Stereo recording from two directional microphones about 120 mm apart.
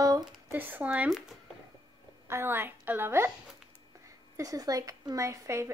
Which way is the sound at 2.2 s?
20° right (ahead or behind).